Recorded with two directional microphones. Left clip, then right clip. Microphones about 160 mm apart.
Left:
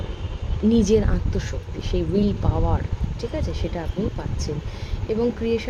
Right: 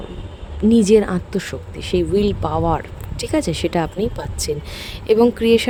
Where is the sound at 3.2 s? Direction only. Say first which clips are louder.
Right 9 dB; 45° right (ahead or behind).